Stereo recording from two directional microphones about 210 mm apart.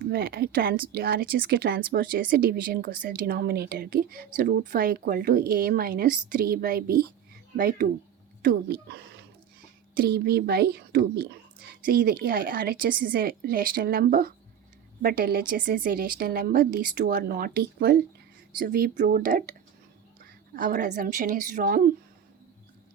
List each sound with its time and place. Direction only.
0.1 s speech: 45° right (ahead or behind)
20.6 s a woman's voice: 40° right (ahead or behind)